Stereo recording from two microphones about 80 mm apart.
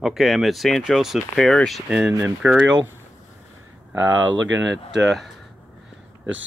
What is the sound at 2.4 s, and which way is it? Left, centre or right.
Speech, right.